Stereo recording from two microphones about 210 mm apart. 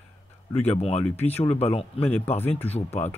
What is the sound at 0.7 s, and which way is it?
Speech, 30° left (ahead or behind).